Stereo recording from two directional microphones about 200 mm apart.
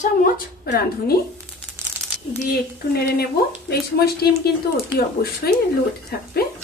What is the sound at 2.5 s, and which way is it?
A woman's voice, 50° left (ahead or behind).